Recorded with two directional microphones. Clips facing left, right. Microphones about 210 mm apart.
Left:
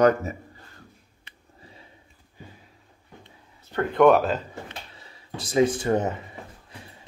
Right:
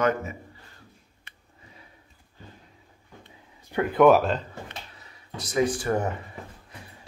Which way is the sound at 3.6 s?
10° right (ahead or behind).